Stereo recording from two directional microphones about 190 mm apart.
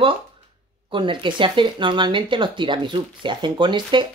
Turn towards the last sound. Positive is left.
turn(degrees=-25)  # may be behind; listen again after turning